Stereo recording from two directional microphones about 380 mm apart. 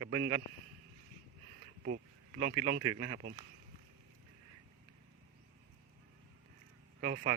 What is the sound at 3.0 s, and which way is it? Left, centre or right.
Speech, right.